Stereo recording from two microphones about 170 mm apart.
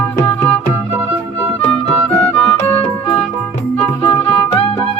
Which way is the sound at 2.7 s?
35° left (ahead or behind).